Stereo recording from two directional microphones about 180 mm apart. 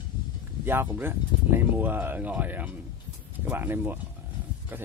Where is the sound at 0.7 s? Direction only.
10° right (ahead or behind).